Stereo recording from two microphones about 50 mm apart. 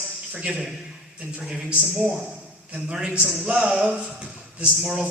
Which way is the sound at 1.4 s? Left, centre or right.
Centre.